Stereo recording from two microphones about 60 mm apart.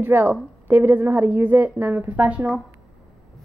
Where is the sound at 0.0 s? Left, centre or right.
Right.